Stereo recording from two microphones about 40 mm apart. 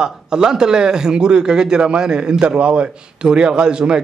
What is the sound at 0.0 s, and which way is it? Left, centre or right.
Speech, centre.